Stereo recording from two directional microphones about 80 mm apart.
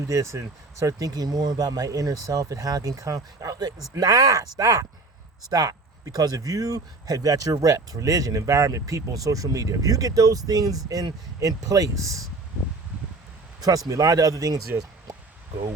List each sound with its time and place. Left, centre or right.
0.1 s speech: right
13.6 s speech: right